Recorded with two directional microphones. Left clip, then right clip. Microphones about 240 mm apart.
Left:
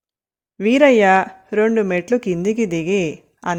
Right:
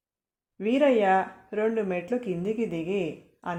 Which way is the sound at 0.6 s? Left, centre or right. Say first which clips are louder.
Left 10 dB; left.